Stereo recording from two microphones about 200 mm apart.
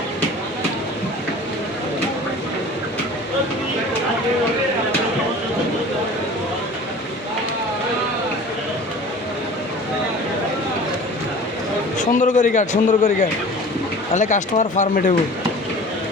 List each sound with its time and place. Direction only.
11.9 s a man's voice: 35° left (ahead or behind)